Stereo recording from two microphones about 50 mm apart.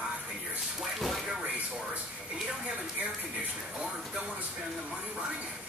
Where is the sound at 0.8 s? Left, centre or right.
Centre.